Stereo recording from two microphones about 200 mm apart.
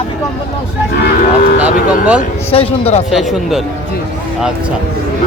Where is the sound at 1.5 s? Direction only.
5° right (ahead or behind).